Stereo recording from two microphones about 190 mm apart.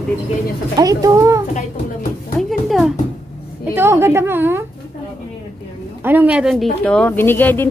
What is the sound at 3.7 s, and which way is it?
Speech, 15° right (ahead or behind).